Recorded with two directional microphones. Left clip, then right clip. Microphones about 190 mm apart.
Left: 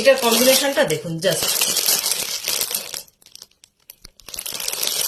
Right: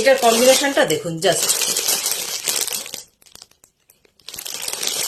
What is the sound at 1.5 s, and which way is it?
Speech, 5° right (ahead or behind).